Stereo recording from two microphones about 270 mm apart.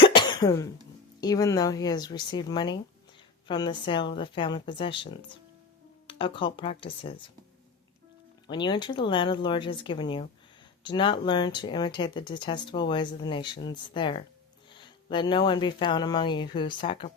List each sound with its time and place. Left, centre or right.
0.0 s cough: centre
1.2 s speech: centre
6.1 s speech: centre
8.4 s speech: centre